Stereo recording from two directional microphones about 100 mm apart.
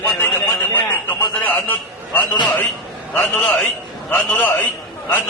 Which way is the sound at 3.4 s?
15° left (ahead or behind).